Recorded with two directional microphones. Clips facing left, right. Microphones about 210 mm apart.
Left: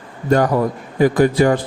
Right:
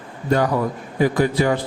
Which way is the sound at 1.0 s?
50° left (ahead or behind).